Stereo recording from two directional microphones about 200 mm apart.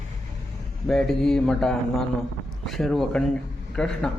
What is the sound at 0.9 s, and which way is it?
Speech, centre (ahead or behind).